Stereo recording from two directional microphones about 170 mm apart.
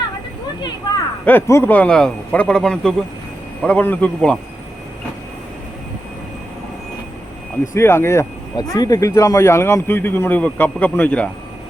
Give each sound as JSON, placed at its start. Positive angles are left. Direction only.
{"t": 1.2, "sound": "speech", "side_deg": 10}
{"t": 7.6, "sound": "speech", "side_deg": 15}